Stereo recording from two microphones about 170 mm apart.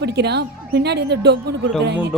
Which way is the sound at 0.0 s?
80° right.